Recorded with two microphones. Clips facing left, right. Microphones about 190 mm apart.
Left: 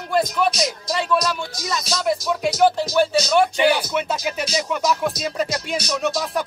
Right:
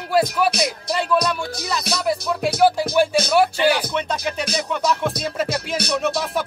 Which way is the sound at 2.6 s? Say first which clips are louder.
Right 1 dB; 10° right (ahead or behind).